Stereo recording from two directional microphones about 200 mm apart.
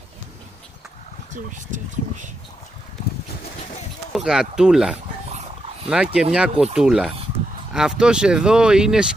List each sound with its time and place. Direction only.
1.3 s speech: 40° right (ahead or behind)
4.1 s speech: centre (ahead or behind)